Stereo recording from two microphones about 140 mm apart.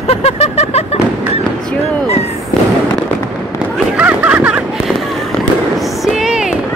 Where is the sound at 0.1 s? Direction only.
50° left (ahead or behind).